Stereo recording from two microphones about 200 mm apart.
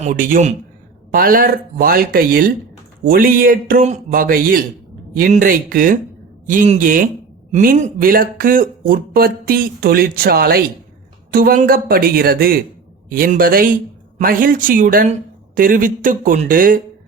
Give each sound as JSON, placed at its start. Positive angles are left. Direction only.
{"t": 0.0, "sound": "speech", "side_deg": -40}